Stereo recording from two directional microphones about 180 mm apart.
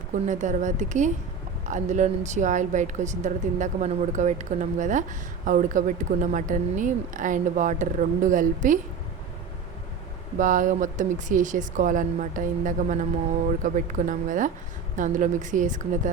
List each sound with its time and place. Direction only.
0.3 s a woman's voice: 45° right (ahead or behind)
10.3 s a woman's voice: 45° right (ahead or behind)